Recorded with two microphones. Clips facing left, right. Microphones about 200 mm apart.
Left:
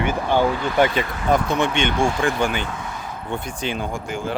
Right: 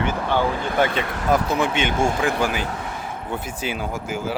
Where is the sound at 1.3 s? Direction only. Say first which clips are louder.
Left 1 dB; 5° right (ahead or behind).